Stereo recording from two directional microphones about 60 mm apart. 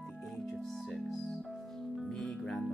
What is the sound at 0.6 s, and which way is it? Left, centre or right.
Speech, centre.